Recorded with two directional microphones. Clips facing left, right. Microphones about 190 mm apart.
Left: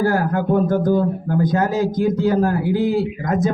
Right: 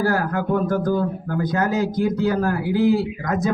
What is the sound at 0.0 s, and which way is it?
A man's voice, 25° left (ahead or behind).